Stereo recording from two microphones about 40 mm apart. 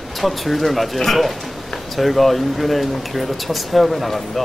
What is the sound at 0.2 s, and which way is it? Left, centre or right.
Speech, centre.